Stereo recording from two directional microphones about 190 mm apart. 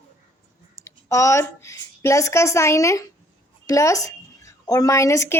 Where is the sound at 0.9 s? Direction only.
15° left (ahead or behind).